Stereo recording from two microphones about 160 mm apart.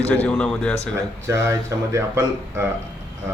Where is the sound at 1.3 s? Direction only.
20° right (ahead or behind).